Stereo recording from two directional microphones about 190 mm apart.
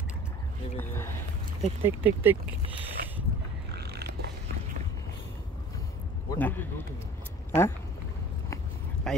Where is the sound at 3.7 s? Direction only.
60° right (ahead or behind).